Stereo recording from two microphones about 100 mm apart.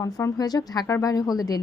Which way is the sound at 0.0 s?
40° left (ahead or behind).